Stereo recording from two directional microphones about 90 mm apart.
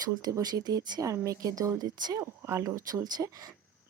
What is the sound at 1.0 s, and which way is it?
Speech, 35° right (ahead or behind).